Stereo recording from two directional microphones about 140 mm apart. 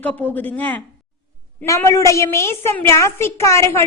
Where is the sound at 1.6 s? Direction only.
20° left (ahead or behind).